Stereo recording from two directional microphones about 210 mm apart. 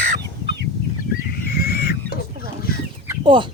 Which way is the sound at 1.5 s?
45° left (ahead or behind).